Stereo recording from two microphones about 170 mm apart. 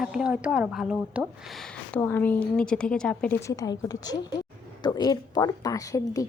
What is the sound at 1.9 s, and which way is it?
A woman's voice, 10° left (ahead or behind).